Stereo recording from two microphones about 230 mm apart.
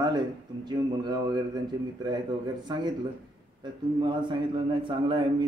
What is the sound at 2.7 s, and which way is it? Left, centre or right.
Speech, centre.